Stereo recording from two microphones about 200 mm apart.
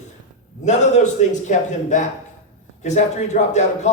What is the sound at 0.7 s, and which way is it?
Speech, 35° left (ahead or behind).